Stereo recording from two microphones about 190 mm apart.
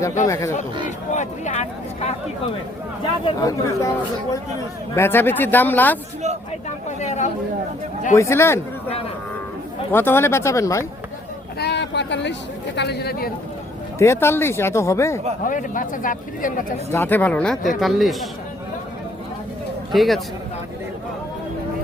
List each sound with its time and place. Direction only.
0.3 s speech: 15° left (ahead or behind)
0.9 s speech: 40° left (ahead or behind)
3.2 s speech: 15° left (ahead or behind)
6.8 s speech: 40° left (ahead or behind)
8.1 s speech: 15° left (ahead or behind)
9.9 s speech: 10° left (ahead or behind)
11.6 s speech: 65° left (ahead or behind)
14.0 s speech: 15° left (ahead or behind)
15.4 s speech: 45° left (ahead or behind)
16.9 s a man's voice: 10° left (ahead or behind)
19.9 s a man's voice: centre (ahead or behind)